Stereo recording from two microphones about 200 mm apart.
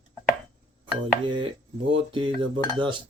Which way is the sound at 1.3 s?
25° right (ahead or behind).